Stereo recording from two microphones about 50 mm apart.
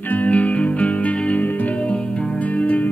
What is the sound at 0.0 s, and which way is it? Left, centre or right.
Music, left.